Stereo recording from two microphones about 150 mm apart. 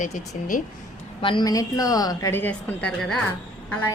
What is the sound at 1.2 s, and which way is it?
A woman's voice, 30° left (ahead or behind).